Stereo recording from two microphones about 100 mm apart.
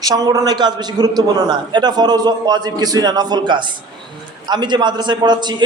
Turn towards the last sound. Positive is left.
turn(degrees=-45)  # may be behind; listen again after turning